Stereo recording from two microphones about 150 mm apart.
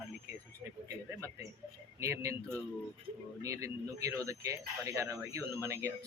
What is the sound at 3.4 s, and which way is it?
Speech, 20° right (ahead or behind).